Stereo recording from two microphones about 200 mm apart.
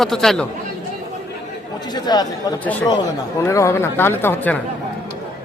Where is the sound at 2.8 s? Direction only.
20° left (ahead or behind).